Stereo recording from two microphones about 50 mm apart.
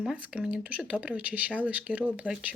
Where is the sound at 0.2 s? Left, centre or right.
Right.